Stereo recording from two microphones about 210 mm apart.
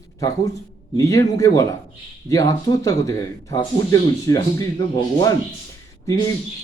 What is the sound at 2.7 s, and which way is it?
Speech, 15° left (ahead or behind).